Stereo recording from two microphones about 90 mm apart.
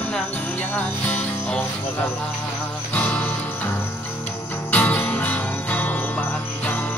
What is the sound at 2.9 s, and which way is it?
Music, 15° left (ahead or behind).